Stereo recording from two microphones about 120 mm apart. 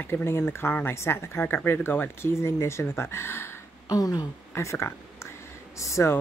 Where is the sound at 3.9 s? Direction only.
30° left (ahead or behind).